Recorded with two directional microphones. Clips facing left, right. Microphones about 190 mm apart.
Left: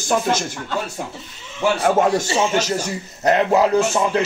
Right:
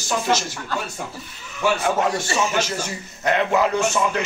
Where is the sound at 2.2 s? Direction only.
30° left (ahead or behind).